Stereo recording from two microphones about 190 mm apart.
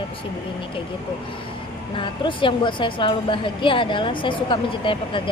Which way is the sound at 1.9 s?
25° left (ahead or behind).